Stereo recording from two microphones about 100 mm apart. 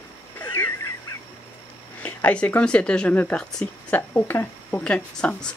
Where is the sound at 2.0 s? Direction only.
20° left (ahead or behind).